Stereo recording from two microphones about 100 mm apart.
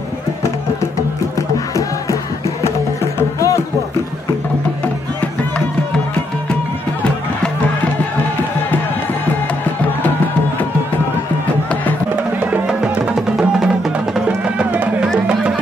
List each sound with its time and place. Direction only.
3.2 s music: 30° left (ahead or behind)
12.4 s music: 15° right (ahead or behind)
14.1 s music: 5° right (ahead or behind)